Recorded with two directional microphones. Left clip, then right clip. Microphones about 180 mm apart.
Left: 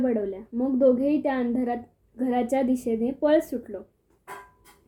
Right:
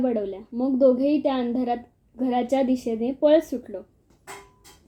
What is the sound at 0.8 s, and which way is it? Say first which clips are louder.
A woman's voice: right 2 dB; 10° right (ahead or behind).